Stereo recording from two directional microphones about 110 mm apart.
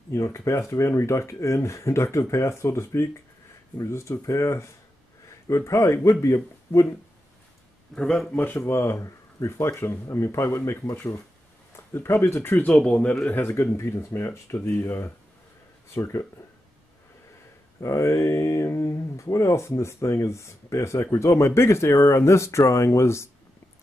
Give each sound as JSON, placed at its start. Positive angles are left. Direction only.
{"t": 0.1, "sound": "a man's voice", "side_deg": 25}
{"t": 7.9, "sound": "speech", "side_deg": 10}
{"t": 17.7, "sound": "speech", "side_deg": 25}